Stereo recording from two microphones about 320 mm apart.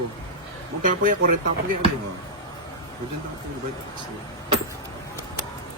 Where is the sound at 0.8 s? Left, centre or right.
Right.